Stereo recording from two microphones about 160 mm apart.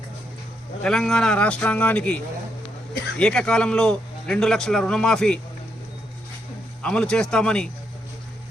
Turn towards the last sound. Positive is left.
turn(degrees=5)  # may be behind; listen again after turning